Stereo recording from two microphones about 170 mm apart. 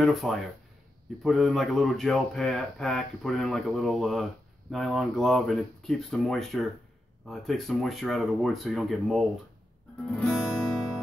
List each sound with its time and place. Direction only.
0.0 s speech: centre (ahead or behind)
10.0 s guitar: 5° left (ahead or behind)